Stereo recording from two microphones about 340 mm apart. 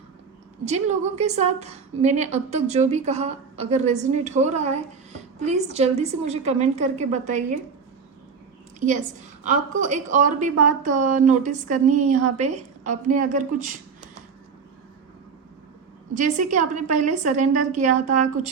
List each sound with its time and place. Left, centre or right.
0.6 s a woman's voice: centre
8.8 s a woman's voice: right
16.1 s a woman's voice: right